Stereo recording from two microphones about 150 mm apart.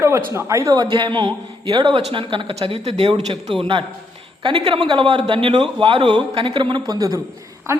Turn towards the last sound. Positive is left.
turn(degrees=-20)  # may be behind; listen again after turning